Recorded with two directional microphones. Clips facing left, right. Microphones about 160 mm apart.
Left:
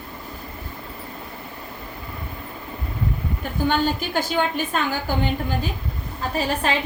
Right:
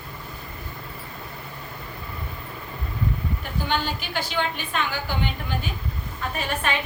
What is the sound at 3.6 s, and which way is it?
A woman's voice, 45° left (ahead or behind).